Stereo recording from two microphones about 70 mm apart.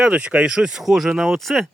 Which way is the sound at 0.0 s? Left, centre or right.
Centre.